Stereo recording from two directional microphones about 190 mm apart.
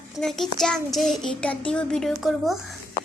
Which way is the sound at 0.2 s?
Centre (ahead or behind).